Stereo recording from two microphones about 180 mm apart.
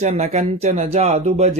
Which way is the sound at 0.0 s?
40° right (ahead or behind).